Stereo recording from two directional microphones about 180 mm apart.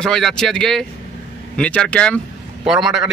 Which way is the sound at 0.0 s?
5° left (ahead or behind).